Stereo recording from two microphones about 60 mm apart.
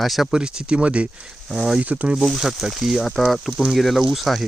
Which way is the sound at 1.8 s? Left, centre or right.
Right.